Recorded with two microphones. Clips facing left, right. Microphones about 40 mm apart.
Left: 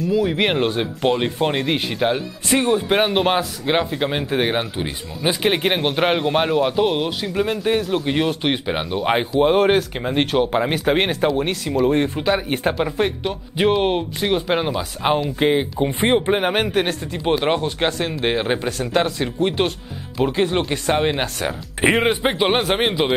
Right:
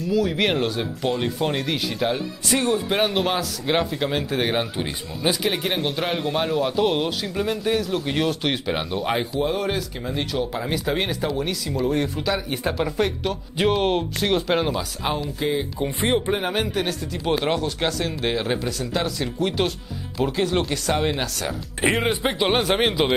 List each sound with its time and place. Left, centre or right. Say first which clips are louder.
0.1 s speech: left 1 dB; left
0.7 s speech: left 5 dB; left; by 5.3 s centre
5.3 s speech: left 6 dB; left
6.5 s speech: left 3 dB; centre
9.4 s speech: left 8 dB; left
12.7 s speech: left 2 dB; left
14.8 s speech: left 6 dB; left
15.3 s speech: left 6 dB; left
15.8 s speech: left 2 dB; left